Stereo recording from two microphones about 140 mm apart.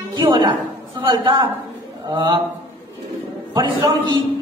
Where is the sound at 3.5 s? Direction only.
30° right (ahead or behind).